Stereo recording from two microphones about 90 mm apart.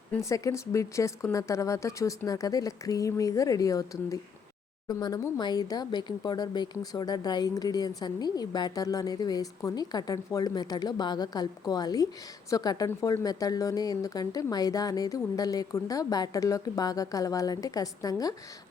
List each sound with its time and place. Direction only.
0.2 s speech: 35° left (ahead or behind)